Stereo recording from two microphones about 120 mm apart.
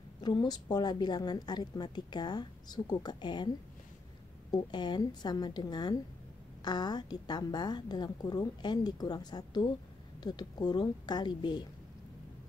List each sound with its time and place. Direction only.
0.2 s a woman's voice: 35° left (ahead or behind)
4.5 s a woman's voice: 40° left (ahead or behind)